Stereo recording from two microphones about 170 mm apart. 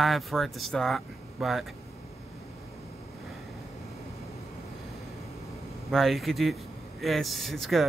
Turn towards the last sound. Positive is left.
turn(degrees=0)  # may be behind; listen again after turning